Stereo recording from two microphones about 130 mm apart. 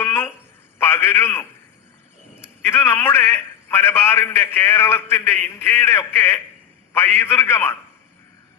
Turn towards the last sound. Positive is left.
turn(degrees=20)  # may be behind; listen again after turning